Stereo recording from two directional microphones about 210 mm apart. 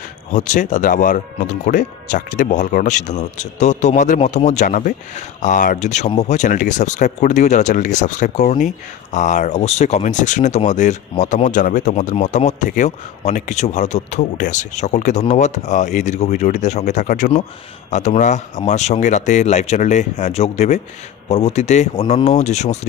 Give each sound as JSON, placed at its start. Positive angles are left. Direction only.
{"t": 0.3, "sound": "speech", "side_deg": 35}